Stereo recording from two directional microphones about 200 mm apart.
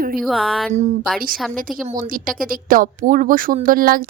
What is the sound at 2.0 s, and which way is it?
Speech, 45° right (ahead or behind).